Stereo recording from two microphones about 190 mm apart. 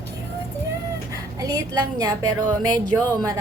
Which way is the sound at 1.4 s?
20° right (ahead or behind).